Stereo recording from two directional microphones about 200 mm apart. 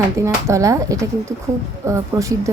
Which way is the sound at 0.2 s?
15° right (ahead or behind).